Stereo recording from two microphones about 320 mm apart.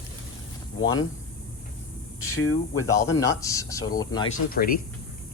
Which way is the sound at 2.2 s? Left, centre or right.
Left.